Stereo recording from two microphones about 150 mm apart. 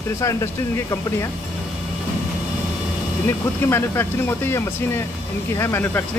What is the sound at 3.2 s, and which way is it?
Speech, 15° left (ahead or behind).